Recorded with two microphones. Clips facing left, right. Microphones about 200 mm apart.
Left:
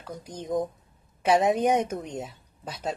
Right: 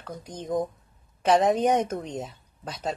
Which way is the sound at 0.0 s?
10° left (ahead or behind).